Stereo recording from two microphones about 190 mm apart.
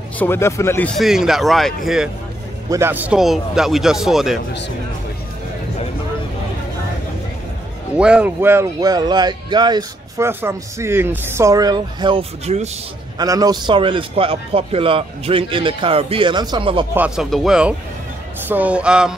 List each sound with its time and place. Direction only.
0.2 s speech: 15° left (ahead or behind)
2.7 s speech: 10° right (ahead or behind)
8.0 s speech: 5° right (ahead or behind); by 12.6 s 30° right (ahead or behind)
13.2 s speech: 20° right (ahead or behind)
16.9 s speech: 5° right (ahead or behind)